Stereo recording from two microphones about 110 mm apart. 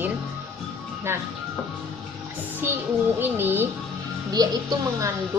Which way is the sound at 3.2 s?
20° right (ahead or behind).